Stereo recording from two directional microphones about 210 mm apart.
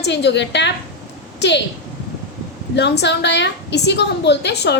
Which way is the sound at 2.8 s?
55° left (ahead or behind).